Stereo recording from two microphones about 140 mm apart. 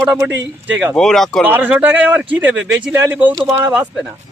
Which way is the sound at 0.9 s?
5° left (ahead or behind).